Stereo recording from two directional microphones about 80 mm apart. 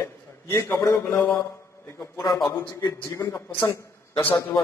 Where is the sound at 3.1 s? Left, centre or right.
Left.